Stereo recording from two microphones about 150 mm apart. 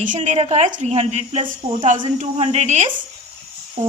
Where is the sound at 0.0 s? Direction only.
55° right (ahead or behind).